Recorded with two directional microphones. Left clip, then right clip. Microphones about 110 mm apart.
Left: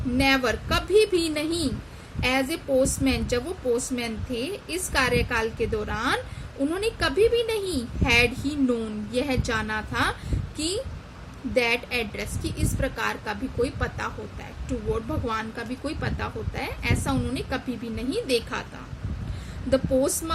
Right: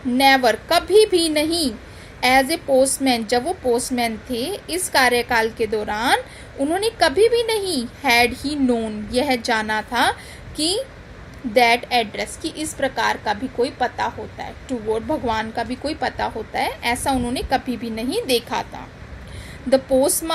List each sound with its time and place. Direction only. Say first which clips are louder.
0.2 s a woman's voice: right 8 dB; 25° right (ahead or behind)
11.5 s a woman's voice: right 8 dB; 25° right (ahead or behind)
19.7 s a woman's voice: right 6 dB; 25° right (ahead or behind)